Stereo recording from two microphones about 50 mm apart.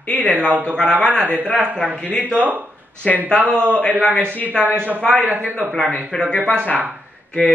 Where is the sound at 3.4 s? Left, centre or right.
Right.